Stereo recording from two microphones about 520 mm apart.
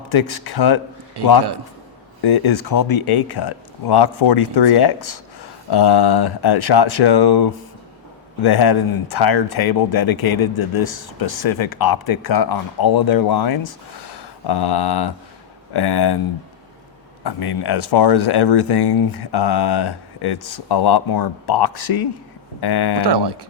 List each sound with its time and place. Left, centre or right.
0.1 s speech: left
1.2 s speech: right
2.2 s speech: left
17.2 s speech: left
23.0 s speech: right